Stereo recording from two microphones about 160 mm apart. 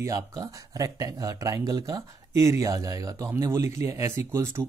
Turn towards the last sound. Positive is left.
turn(degrees=-15)  # may be behind; listen again after turning